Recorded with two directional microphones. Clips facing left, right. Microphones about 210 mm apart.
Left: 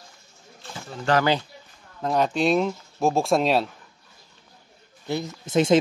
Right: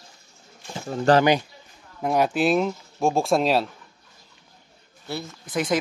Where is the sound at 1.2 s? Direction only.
15° right (ahead or behind).